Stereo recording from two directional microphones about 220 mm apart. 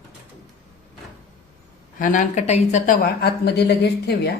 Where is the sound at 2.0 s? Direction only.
35° left (ahead or behind).